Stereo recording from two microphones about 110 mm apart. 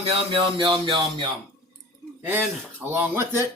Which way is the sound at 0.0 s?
60° right (ahead or behind).